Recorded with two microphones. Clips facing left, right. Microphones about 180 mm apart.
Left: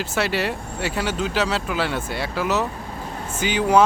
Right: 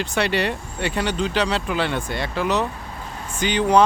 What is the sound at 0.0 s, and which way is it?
Speech, 5° left (ahead or behind).